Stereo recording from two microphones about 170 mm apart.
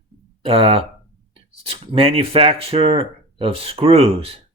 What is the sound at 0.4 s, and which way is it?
Speech, 30° right (ahead or behind).